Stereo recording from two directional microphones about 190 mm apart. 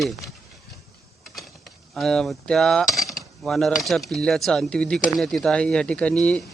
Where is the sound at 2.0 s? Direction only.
Centre (ahead or behind).